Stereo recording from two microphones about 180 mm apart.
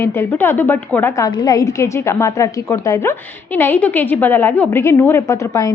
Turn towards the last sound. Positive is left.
turn(degrees=15)  # may be behind; listen again after turning